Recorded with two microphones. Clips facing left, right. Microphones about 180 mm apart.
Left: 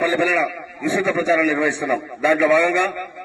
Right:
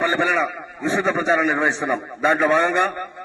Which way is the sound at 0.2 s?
15° left (ahead or behind).